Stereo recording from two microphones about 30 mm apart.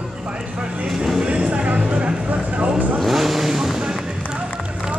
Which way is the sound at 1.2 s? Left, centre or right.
Right.